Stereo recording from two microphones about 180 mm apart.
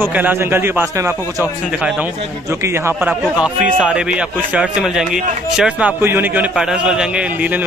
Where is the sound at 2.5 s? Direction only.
15° right (ahead or behind).